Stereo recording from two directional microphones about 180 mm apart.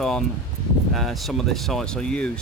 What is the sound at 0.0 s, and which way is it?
Speech, centre (ahead or behind).